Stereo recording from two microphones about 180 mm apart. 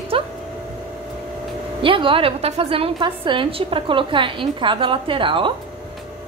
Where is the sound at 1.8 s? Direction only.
30° right (ahead or behind).